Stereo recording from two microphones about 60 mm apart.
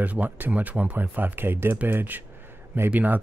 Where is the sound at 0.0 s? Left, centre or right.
Right.